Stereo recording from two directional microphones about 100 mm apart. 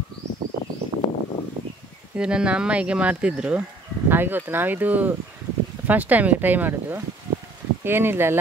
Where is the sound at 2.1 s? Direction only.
10° right (ahead or behind).